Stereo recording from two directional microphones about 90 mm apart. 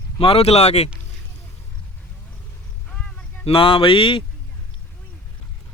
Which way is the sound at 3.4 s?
90° left.